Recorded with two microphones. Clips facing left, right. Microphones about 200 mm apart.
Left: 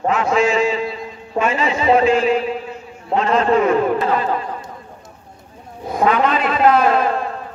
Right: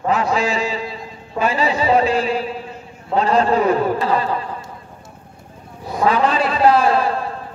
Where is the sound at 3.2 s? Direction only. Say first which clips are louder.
Even; 35° right (ahead or behind).